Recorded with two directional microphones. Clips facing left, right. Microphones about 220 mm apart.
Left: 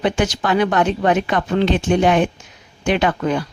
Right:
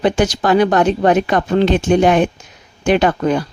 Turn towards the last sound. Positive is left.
turn(degrees=-40)  # may be behind; listen again after turning